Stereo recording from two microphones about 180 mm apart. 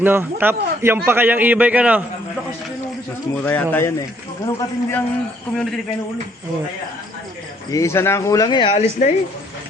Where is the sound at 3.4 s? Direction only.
10° left (ahead or behind).